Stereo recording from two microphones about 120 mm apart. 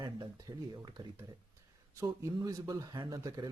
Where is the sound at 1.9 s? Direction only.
25° right (ahead or behind).